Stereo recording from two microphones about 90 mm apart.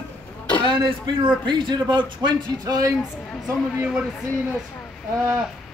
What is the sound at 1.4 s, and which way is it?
Speech, 60° right (ahead or behind).